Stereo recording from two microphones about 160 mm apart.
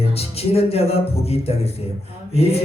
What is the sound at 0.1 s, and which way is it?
A man's voice, 40° left (ahead or behind).